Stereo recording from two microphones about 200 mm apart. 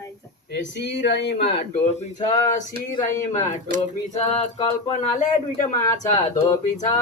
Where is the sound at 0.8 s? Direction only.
60° left (ahead or behind).